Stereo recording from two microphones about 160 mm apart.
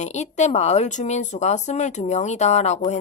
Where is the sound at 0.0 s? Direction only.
45° left (ahead or behind).